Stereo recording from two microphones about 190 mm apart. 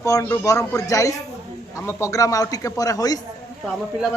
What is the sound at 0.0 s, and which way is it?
Speech, 15° left (ahead or behind).